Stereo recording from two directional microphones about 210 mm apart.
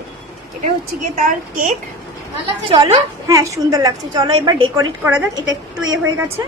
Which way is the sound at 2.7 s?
25° right (ahead or behind).